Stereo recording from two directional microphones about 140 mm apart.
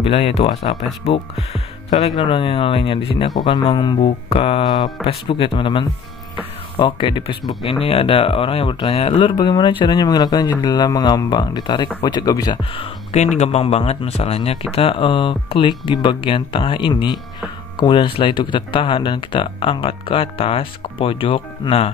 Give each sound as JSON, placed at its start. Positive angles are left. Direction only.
{"t": 0.0, "sound": "speech", "side_deg": 45}
{"t": 4.3, "sound": "speech", "side_deg": 45}
{"t": 12.7, "sound": "speech", "side_deg": 45}